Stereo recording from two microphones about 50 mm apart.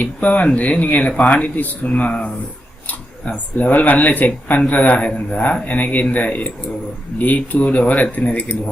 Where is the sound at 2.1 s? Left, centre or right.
Centre.